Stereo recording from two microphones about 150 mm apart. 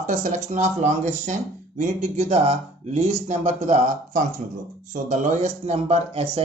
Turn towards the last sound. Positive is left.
turn(degrees=-40)  # may be behind; listen again after turning